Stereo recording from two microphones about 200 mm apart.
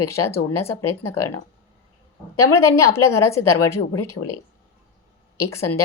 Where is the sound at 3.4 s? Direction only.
15° left (ahead or behind).